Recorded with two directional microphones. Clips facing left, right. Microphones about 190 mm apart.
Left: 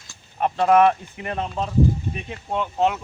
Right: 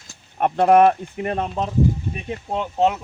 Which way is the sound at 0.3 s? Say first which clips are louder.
Right 2 dB; 50° right (ahead or behind).